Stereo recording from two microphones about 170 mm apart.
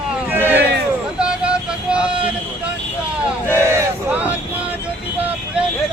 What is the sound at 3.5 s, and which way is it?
Crowd, 15° right (ahead or behind).